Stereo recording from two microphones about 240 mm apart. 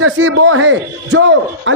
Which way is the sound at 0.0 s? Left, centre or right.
Right.